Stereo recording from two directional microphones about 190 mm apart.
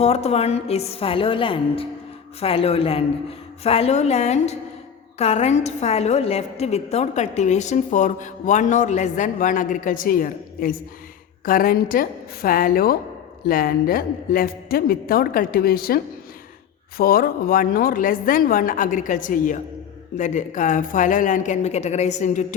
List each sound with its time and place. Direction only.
0.0 s a woman's voice: 35° left (ahead or behind); by 16.0 s 50° left (ahead or behind)
17.0 s a woman's voice: 50° left (ahead or behind)